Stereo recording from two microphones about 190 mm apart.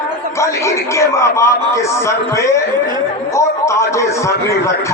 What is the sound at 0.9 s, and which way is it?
Music, 15° left (ahead or behind).